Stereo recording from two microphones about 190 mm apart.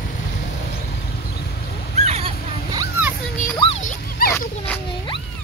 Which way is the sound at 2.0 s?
35° right (ahead or behind).